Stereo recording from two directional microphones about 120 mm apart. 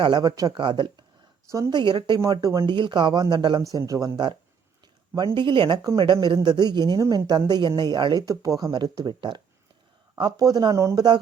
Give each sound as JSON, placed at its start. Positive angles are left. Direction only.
{"t": 0.2, "sound": "speech", "side_deg": -30}
{"t": 1.5, "sound": "speech", "side_deg": -25}
{"t": 1.7, "sound": "speech", "side_deg": -40}
{"t": 2.6, "sound": "speech", "side_deg": -40}
{"t": 3.6, "sound": "speech", "side_deg": -30}